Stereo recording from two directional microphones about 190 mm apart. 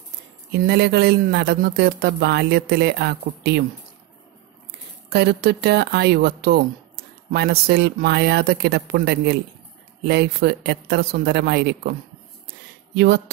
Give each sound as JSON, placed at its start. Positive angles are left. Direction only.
{"t": 0.5, "sound": "speech", "side_deg": -60}
{"t": 5.1, "sound": "speech", "side_deg": -60}
{"t": 12.9, "sound": "speech", "side_deg": -60}